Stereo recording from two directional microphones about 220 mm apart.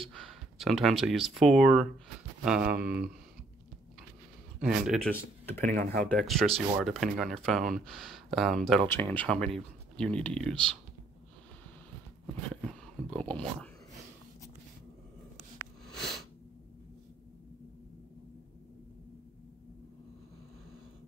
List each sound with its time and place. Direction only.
0.1 s speech: centre (ahead or behind)
4.6 s speech: 5° right (ahead or behind)
5.6 s speech: 35° right (ahead or behind)
6.0 s speech: centre (ahead or behind)
12.6 s a sound: 5° left (ahead or behind)